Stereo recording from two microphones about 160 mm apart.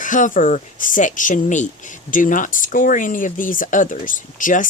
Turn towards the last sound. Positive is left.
turn(degrees=55)  # may be behind; listen again after turning